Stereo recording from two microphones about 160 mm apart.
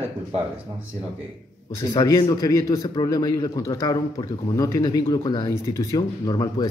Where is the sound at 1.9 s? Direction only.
25° left (ahead or behind).